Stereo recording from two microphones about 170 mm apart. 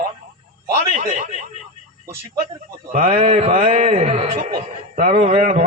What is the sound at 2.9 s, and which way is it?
Speech, 45° right (ahead or behind).